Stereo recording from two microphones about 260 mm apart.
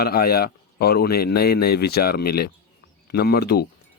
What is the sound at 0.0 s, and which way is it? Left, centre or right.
Speech, left.